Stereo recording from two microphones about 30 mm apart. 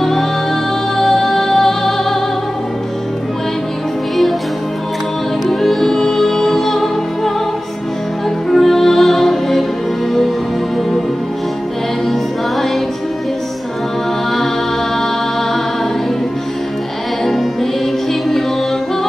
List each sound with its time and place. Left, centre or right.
0.0 s music: centre
5.5 s music: centre
8.5 s music: centre
17.2 s music: centre